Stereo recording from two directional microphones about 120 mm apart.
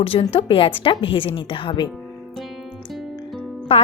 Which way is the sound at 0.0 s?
50° left (ahead or behind).